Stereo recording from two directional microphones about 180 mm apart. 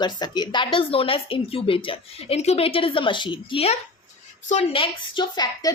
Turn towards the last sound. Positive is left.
turn(degrees=25)  # may be behind; listen again after turning